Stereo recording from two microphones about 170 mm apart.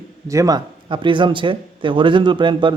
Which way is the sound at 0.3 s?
20° right (ahead or behind).